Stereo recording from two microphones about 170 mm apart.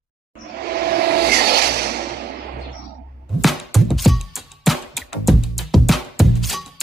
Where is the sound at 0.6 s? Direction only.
65° right (ahead or behind).